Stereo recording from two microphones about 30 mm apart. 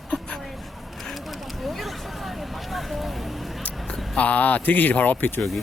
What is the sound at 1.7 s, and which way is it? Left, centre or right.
Hubbub, centre.